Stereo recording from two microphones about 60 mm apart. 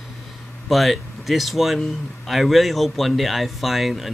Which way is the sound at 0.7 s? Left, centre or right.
Centre.